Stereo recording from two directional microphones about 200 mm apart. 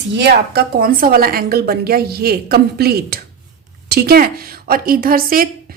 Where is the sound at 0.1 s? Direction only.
55° right (ahead or behind).